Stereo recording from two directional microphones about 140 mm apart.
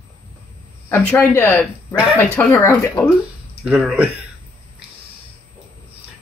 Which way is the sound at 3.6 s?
10° right (ahead or behind).